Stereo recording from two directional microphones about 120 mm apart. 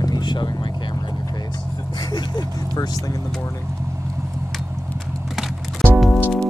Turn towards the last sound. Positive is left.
turn(degrees=0)  # may be behind; listen again after turning